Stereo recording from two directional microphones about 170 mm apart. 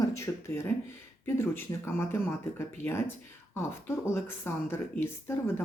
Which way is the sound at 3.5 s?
15° left (ahead or behind).